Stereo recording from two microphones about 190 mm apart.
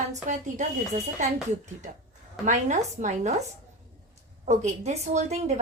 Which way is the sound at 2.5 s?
40° right (ahead or behind).